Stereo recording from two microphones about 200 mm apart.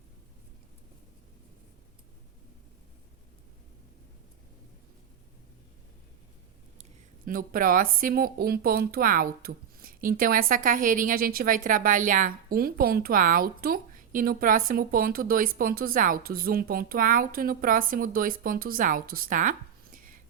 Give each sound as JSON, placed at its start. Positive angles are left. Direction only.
{"t": 7.3, "sound": "speech", "side_deg": -45}